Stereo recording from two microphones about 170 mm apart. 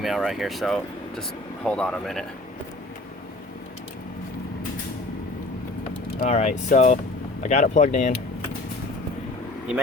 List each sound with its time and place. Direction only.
0.0 s speech: centre (ahead or behind)
5.8 s mechanisms: 55° left (ahead or behind)
6.3 s speech: 40° left (ahead or behind)